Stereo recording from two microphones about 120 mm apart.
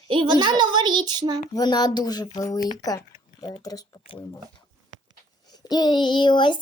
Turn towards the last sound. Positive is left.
turn(degrees=40)  # may be behind; listen again after turning